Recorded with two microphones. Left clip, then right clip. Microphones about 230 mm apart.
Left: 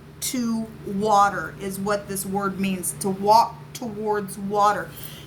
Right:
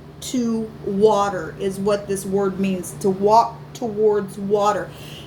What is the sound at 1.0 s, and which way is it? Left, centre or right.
Speech, left.